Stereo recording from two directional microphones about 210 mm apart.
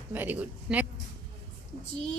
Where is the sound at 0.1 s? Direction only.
10° right (ahead or behind).